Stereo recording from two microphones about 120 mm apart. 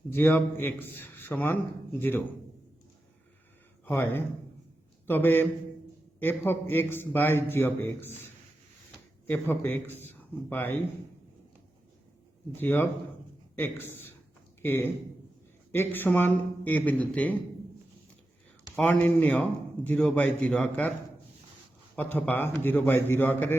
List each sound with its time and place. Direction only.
0.1 s a man's voice: 20° left (ahead or behind)
3.8 s a man's voice: 20° left (ahead or behind)
9.2 s a man's voice: 15° left (ahead or behind)
12.5 s a man's voice: 15° left (ahead or behind)
18.8 s a man's voice: 10° left (ahead or behind)
21.9 s a man's voice: 15° left (ahead or behind)